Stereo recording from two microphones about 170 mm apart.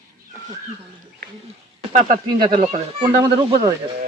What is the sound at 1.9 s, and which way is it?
A child's voice, 25° right (ahead or behind).